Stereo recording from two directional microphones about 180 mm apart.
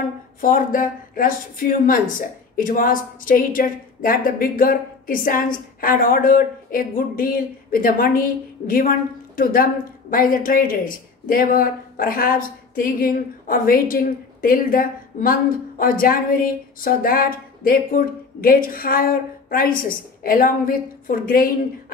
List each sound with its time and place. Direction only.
0.4 s speech: 50° left (ahead or behind)